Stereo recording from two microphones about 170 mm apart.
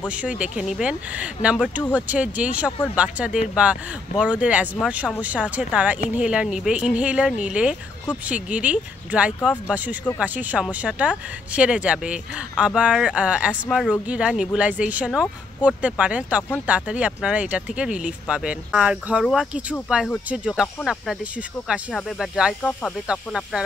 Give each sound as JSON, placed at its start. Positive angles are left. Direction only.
{"t": 0.4, "sound": "speech", "side_deg": -5}
{"t": 22.6, "sound": "speech", "side_deg": 10}
{"t": 23.0, "sound": "speech", "side_deg": -5}